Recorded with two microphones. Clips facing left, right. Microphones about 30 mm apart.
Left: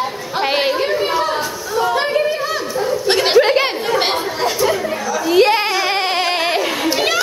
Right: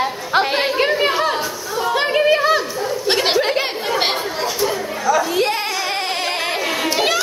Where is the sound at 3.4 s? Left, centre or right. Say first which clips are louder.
Left 6 dB; centre.